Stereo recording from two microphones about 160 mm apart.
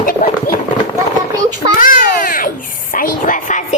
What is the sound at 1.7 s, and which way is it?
Baby cry, 55° left (ahead or behind).